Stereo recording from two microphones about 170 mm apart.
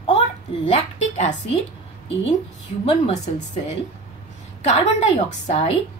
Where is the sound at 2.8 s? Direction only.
40° left (ahead or behind).